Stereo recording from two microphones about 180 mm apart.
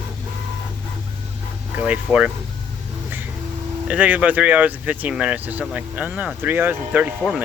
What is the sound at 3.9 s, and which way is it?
Speech, 10° right (ahead or behind).